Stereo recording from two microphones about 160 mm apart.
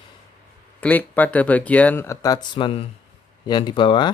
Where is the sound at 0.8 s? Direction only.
10° left (ahead or behind); by 4.1 s 30° left (ahead or behind).